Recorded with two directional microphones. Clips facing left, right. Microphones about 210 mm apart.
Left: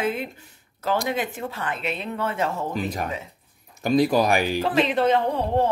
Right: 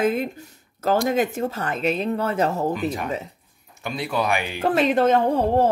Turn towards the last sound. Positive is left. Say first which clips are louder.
# right 3 dB
turn(degrees=-45)  # may be behind; listen again after turning